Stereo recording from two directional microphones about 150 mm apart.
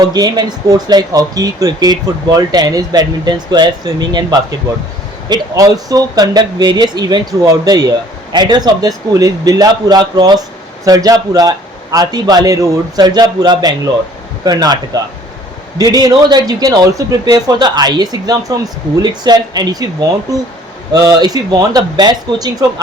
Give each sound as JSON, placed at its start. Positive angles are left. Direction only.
{"t": 0.0, "sound": "speech", "side_deg": -25}
{"t": 15.8, "sound": "speech", "side_deg": -25}